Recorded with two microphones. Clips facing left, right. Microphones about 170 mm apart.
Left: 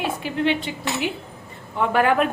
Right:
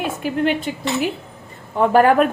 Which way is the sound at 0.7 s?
50° right (ahead or behind).